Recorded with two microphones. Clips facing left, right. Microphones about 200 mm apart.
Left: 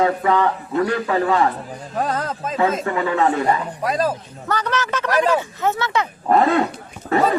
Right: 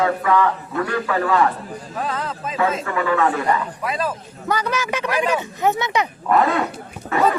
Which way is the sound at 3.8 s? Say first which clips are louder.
Left 4 dB; 40° left (ahead or behind).